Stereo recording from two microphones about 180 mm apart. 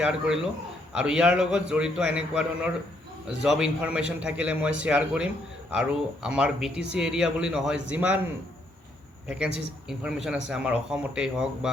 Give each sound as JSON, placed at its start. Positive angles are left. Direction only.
{"t": 0.0, "sound": "a man's voice", "side_deg": -5}
{"t": 9.2, "sound": "speech", "side_deg": -5}